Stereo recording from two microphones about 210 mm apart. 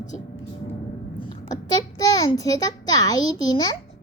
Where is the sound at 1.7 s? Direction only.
20° left (ahead or behind).